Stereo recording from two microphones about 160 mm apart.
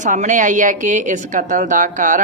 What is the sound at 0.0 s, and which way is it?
Speech, 50° right (ahead or behind).